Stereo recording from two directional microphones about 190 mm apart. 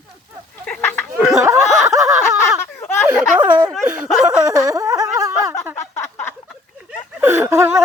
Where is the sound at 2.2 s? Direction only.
15° left (ahead or behind).